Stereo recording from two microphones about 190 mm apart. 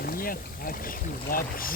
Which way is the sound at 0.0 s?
50° left (ahead or behind).